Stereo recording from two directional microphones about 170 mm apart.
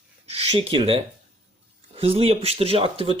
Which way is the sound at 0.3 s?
35° right (ahead or behind).